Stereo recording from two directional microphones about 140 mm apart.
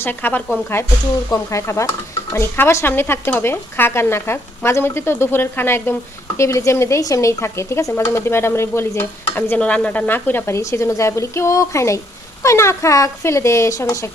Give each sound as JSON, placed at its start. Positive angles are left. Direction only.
{"t": 0.0, "sound": "speech", "side_deg": 15}